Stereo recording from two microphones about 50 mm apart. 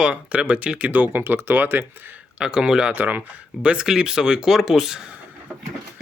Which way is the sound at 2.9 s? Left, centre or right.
Right.